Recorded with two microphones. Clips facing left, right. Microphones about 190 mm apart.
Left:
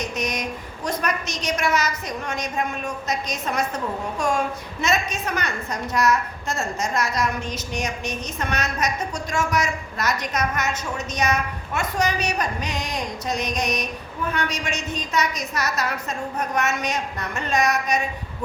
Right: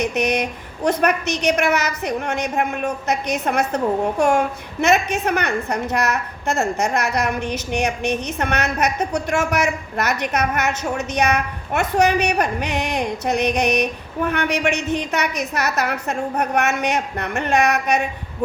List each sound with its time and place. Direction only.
0.0 s a woman's voice: 65° right (ahead or behind)